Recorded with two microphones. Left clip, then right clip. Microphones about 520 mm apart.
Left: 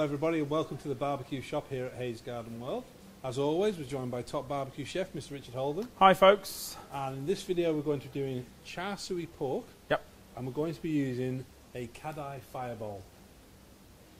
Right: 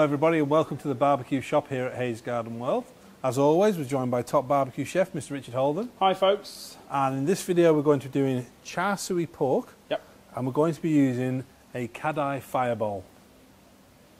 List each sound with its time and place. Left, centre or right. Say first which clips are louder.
0.0 s a man's voice: right 8 dB; right
5.9 s speech: left 3 dB; left
6.9 s speech: right 9 dB; right
9.9 s a man's voice: even; left
10.3 s speech: right 10 dB; right